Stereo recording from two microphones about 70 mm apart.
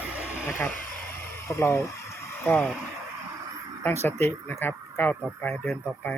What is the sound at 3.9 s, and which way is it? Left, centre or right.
Speech, left.